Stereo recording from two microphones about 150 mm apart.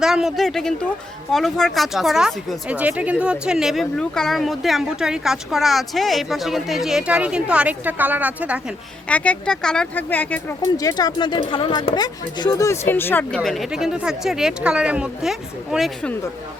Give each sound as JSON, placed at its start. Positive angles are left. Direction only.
{"t": 0.0, "sound": "speech", "side_deg": -5}
{"t": 9.0, "sound": "speech", "side_deg": 10}
{"t": 10.8, "sound": "speech", "side_deg": 25}
{"t": 13.4, "sound": "speech", "side_deg": 0}